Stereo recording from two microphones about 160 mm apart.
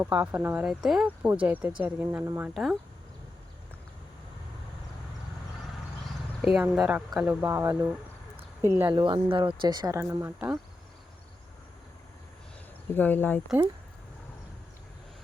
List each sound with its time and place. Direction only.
0.0 s speech: 10° right (ahead or behind)
2.5 s speech: centre (ahead or behind)
6.4 s speech: 5° right (ahead or behind)
8.4 s a sound: 15° right (ahead or behind)
8.9 s speech: 30° right (ahead or behind)
12.9 s speech: 10° left (ahead or behind)